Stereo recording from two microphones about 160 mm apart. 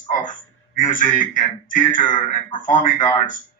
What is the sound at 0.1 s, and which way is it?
A man's voice, 55° left (ahead or behind).